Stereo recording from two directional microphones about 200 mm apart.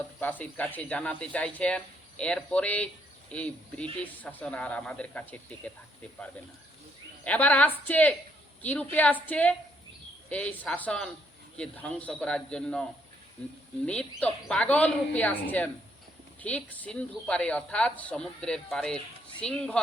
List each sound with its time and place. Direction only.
0.2 s a woman's voice: 10° left (ahead or behind)
7.3 s a woman's voice: 5° left (ahead or behind)
13.8 s a woman's voice: 5° left (ahead or behind)